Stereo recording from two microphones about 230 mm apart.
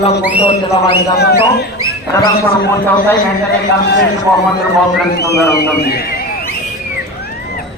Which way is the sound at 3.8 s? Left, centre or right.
Left.